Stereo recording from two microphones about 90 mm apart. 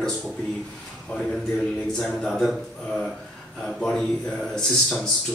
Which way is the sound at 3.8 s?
10° left (ahead or behind).